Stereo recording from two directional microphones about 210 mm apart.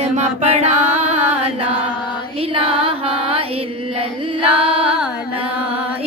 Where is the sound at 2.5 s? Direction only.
25° right (ahead or behind).